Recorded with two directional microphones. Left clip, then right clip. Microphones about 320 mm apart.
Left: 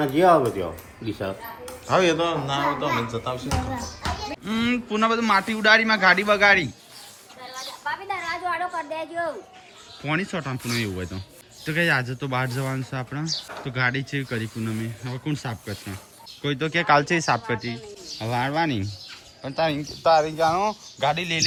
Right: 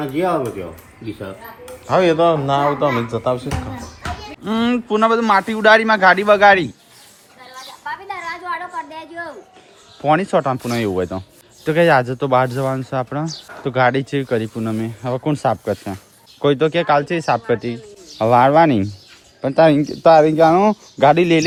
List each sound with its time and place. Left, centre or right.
0.0 s speech: centre
7.5 s a sound: centre
10.0 s speech: centre